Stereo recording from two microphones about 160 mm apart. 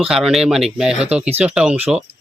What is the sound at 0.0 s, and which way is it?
Speech, 5° right (ahead or behind).